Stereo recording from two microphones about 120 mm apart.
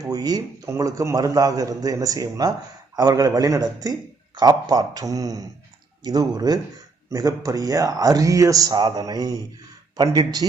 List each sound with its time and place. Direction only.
0.0 s a man's voice: 30° right (ahead or behind)